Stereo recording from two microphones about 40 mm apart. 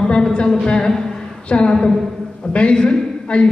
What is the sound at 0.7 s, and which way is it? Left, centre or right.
A man's voice, centre.